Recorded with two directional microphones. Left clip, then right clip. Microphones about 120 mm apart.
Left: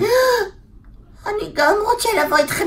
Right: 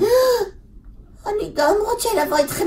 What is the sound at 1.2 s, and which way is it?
Speech, 15° left (ahead or behind).